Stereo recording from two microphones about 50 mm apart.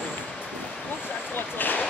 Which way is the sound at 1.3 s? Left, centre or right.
Left.